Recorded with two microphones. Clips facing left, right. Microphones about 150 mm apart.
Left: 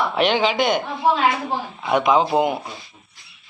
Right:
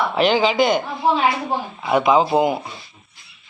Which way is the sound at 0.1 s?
Centre (ahead or behind).